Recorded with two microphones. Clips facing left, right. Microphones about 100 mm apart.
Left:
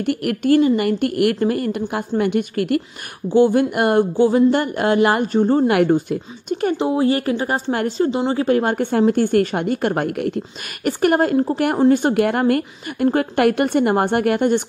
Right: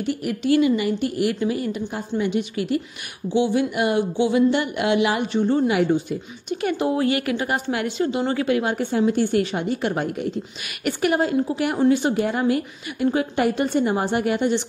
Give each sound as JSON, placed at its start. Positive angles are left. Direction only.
{"t": 0.0, "sound": "a woman's voice", "side_deg": 60}
{"t": 5.7, "sound": "speech", "side_deg": 55}
{"t": 6.8, "sound": "speech", "side_deg": 30}
{"t": 10.8, "sound": "speech", "side_deg": 45}
{"t": 12.2, "sound": "a woman's voice", "side_deg": 60}